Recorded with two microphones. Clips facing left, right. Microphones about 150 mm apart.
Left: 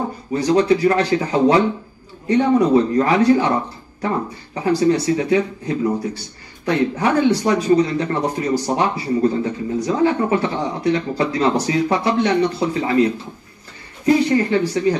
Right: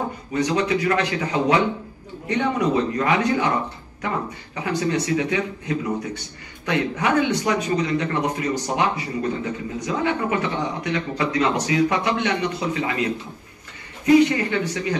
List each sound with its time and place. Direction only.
0.3 s speech: 35° left (ahead or behind)
4.6 s speech: 35° left (ahead or behind)